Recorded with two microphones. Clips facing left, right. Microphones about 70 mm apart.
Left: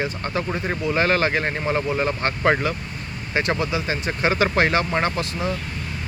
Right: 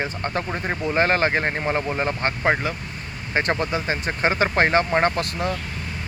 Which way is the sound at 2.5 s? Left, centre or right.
Centre.